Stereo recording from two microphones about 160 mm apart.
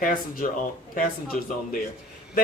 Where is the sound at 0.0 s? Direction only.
60° left (ahead or behind).